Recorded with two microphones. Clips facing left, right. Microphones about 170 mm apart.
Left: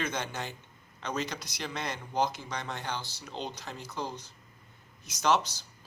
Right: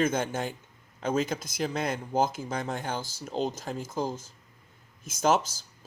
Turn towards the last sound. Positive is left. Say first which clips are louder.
# right 3 dB
turn(degrees=-50)  # may be behind; listen again after turning